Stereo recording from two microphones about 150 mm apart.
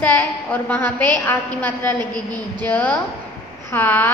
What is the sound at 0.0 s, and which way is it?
Speech, 10° left (ahead or behind).